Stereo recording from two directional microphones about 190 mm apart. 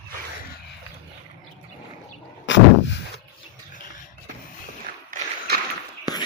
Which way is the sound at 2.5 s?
70° left (ahead or behind).